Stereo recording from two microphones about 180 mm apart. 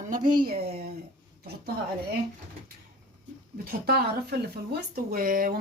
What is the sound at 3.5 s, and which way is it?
Speech, 55° right (ahead or behind).